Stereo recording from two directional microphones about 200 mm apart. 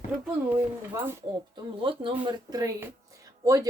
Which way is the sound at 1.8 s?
25° right (ahead or behind).